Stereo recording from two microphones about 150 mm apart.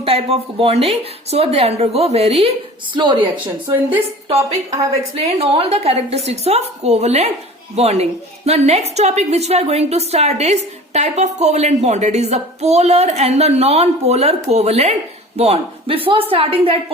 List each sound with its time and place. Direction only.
0.0 s a woman's voice: 40° right (ahead or behind)
2.9 s a man's voice: 30° right (ahead or behind)
3.3 s a woman's voice: 10° right (ahead or behind)
5.1 s a woman's voice: 40° right (ahead or behind)